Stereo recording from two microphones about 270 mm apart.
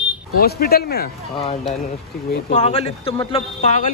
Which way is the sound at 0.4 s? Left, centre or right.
Left.